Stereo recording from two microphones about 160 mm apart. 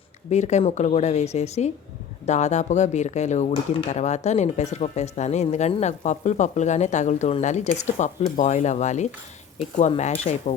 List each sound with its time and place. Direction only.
0.3 s speech: 45° left (ahead or behind)